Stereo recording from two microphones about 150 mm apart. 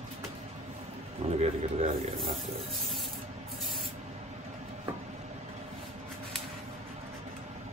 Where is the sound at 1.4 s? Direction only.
40° right (ahead or behind).